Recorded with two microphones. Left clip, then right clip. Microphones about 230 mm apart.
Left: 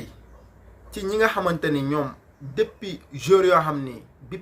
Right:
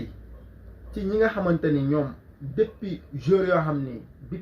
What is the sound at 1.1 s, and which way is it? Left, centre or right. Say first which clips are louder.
Speech: left 2 dB; left.